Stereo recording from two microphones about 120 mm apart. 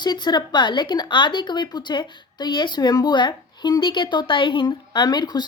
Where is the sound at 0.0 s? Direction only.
35° left (ahead or behind).